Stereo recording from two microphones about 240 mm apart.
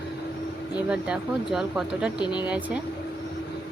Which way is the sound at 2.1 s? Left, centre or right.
Centre.